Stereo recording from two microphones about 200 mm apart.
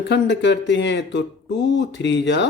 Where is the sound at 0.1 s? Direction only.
60° left (ahead or behind).